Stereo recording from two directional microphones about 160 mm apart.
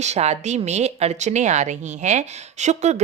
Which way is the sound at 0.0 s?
45° right (ahead or behind).